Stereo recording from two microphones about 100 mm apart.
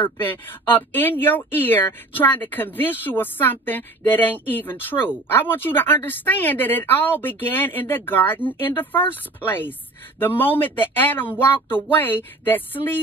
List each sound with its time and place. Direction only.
0.0 s speech: 20° left (ahead or behind)